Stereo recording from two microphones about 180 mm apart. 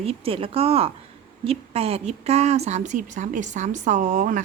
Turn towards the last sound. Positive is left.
turn(degrees=-45)  # may be behind; listen again after turning